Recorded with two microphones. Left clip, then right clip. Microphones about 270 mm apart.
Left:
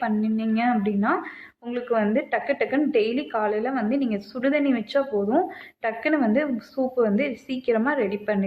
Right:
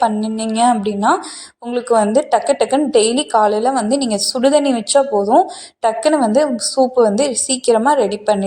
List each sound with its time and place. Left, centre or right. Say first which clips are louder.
0.3 s a woman's voice: right 10 dB; centre